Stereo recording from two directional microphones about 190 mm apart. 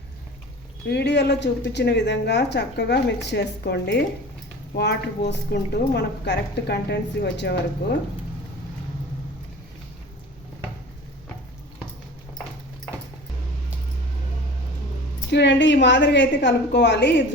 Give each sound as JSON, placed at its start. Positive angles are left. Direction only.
{"t": 0.9, "sound": "a woman's voice", "side_deg": 60}
{"t": 15.3, "sound": "a woman's voice", "side_deg": 65}